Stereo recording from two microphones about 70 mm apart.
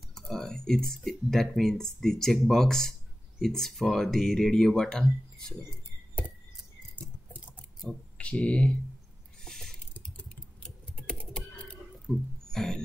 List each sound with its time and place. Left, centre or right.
0.1 s speech: centre
7.8 s speech: centre
9.4 s a sound: centre
10.6 s typing: centre
12.1 s music: centre